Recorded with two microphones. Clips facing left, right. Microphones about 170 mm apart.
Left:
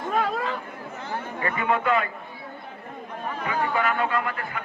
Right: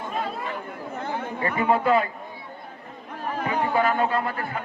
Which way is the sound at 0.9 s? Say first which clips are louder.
Right 3 dB; 55° right (ahead or behind).